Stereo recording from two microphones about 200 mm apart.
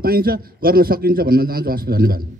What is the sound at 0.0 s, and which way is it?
A man's voice, 50° right (ahead or behind).